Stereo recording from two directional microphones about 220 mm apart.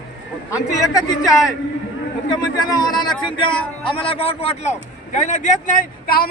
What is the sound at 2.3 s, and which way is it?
A man's voice, 20° left (ahead or behind).